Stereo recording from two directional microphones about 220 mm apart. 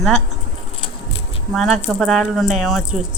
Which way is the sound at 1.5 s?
Centre (ahead or behind).